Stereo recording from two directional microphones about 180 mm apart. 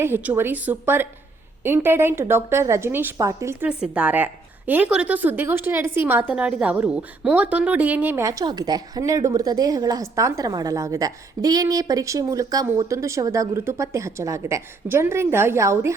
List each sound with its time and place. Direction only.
0.0 s speech: 10° right (ahead or behind)